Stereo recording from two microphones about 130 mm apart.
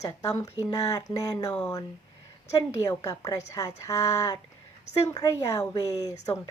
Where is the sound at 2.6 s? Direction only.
30° left (ahead or behind).